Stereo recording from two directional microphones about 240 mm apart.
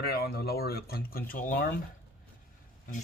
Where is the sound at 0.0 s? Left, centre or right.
Left.